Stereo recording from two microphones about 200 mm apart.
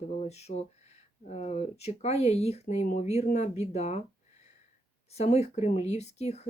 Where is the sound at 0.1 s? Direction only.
35° left (ahead or behind).